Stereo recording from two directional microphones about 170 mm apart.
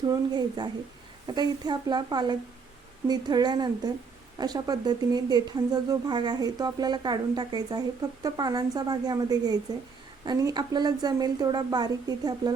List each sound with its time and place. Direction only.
0.0 s speech: 25° right (ahead or behind)